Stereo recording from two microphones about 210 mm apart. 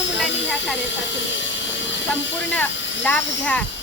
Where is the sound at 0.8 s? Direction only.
60° left (ahead or behind).